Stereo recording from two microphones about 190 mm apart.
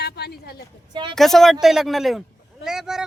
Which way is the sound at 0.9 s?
25° right (ahead or behind).